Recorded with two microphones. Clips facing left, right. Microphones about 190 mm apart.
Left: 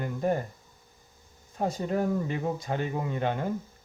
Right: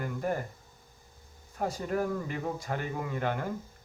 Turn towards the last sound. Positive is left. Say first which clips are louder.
# left 3 dB
turn(degrees=20)  # may be behind; listen again after turning